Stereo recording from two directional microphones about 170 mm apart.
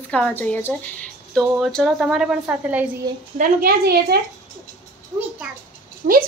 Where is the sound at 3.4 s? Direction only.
65° right (ahead or behind).